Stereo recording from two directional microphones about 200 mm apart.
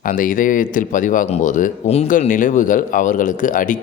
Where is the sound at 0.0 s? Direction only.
40° left (ahead or behind).